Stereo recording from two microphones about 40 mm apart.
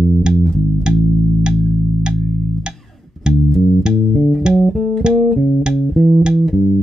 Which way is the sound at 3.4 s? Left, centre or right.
Centre.